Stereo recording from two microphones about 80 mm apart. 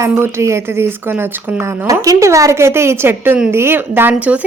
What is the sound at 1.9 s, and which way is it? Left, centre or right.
A woman's voice, right.